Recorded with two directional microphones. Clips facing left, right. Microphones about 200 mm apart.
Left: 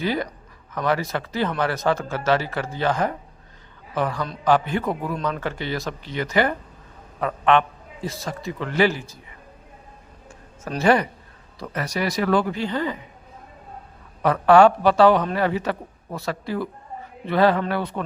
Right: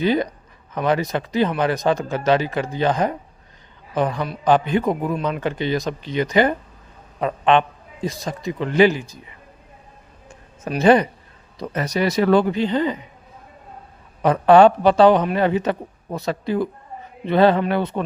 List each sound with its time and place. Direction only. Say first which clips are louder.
0.0 s a man's voice: right 5 dB; 20° right (ahead or behind)
10.2 s a sound: right 4 dB; 15° right (ahead or behind)
11.6 s a man's voice: right 4 dB; 20° right (ahead or behind)
14.2 s a man's voice: right 2 dB; 20° right (ahead or behind)